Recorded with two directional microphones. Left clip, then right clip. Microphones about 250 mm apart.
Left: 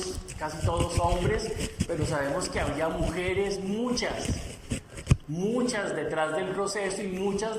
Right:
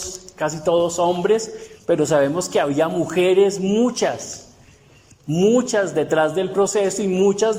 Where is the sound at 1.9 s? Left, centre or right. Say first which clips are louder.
Right 13 dB; right.